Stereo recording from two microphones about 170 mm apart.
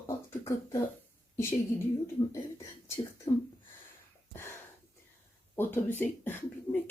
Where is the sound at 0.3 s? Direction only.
15° left (ahead or behind).